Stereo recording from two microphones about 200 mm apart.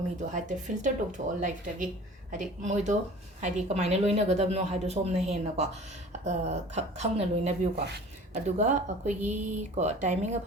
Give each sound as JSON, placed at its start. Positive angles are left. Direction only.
{"t": 0.3, "sound": "a woman's voice", "side_deg": -40}